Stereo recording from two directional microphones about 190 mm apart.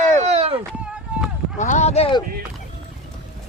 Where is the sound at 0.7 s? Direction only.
5° right (ahead or behind).